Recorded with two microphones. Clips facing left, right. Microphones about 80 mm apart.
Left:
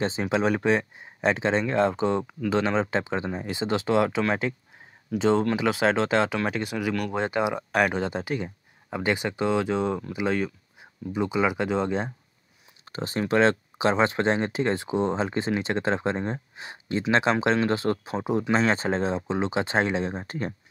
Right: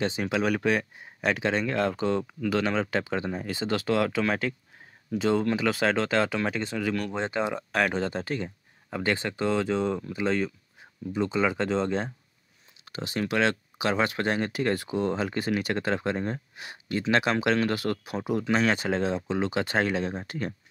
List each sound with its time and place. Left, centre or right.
0.0 s speech: left
12.8 s speech: left